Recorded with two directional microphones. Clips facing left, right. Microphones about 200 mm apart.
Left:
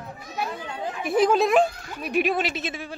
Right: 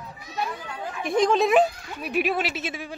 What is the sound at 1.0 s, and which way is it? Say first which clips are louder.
Speech: left 1 dB; 5° left (ahead or behind).